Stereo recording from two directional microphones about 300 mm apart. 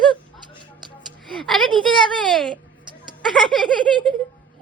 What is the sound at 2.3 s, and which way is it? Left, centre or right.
Giggle, centre.